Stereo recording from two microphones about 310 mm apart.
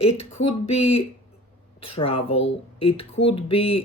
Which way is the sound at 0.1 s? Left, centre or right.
Left.